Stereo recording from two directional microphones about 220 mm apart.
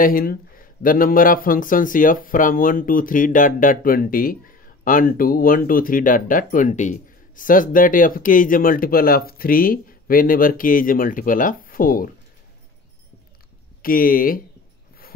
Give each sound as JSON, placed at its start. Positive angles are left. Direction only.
{"t": 0.0, "sound": "speech", "side_deg": 40}
{"t": 13.8, "sound": "speech", "side_deg": 40}